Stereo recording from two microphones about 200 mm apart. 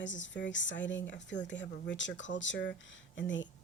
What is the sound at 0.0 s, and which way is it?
A woman's voice, 65° left (ahead or behind).